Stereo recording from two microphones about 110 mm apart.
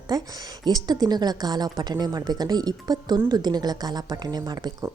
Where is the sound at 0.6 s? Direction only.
40° right (ahead or behind).